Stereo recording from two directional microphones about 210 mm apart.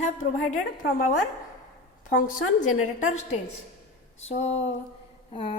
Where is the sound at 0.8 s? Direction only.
40° left (ahead or behind).